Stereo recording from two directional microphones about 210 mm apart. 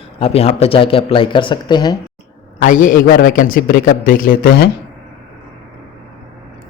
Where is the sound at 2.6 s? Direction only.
40° left (ahead or behind).